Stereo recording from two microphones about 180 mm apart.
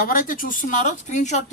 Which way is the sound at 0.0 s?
50° left (ahead or behind).